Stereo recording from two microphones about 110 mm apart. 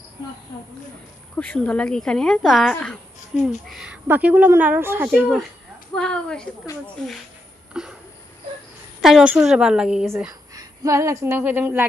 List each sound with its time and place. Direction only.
1.3 s speech: 10° left (ahead or behind)
3.4 s a woman's voice: 5° right (ahead or behind)
5.9 s speech: 10° left (ahead or behind)
7.7 s a sound: 5° right (ahead or behind)
9.0 s a woman's voice: 5° right (ahead or behind)
10.5 s a woman's voice: 35° right (ahead or behind)